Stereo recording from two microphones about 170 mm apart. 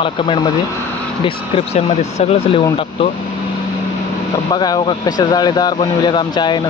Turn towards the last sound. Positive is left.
turn(degrees=25)  # may be behind; listen again after turning